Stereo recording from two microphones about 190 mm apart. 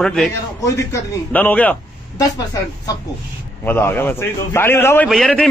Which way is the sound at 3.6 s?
10° left (ahead or behind).